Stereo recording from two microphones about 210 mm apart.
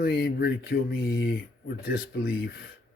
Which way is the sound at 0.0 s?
50° left (ahead or behind).